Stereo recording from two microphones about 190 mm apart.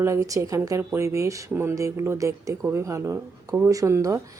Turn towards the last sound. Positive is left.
turn(degrees=-15)  # may be behind; listen again after turning